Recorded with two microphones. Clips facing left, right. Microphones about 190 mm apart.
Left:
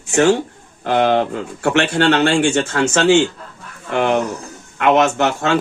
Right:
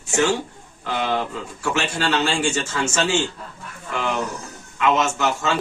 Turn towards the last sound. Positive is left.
turn(degrees=65)  # may be behind; listen again after turning